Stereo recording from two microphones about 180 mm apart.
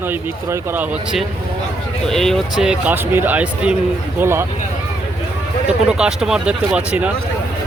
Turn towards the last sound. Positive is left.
turn(degrees=-5)  # may be behind; listen again after turning